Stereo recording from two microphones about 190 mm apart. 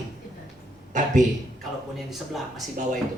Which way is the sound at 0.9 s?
40° right (ahead or behind).